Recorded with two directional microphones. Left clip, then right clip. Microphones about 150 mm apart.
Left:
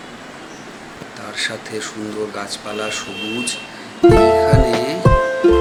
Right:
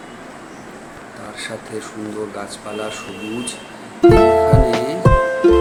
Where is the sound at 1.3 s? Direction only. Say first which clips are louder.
Left 5 dB; 5° right (ahead or behind).